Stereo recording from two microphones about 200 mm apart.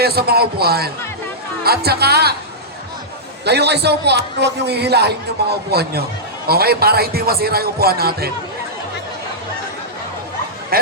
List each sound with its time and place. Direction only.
0.0 s a man's voice: 50° right (ahead or behind)
3.4 s a man's voice: 55° right (ahead or behind)